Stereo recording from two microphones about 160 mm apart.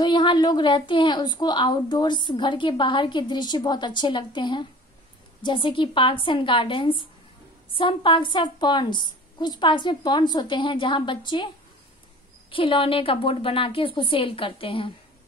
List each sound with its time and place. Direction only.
0.0 s a woman's voice: 30° left (ahead or behind)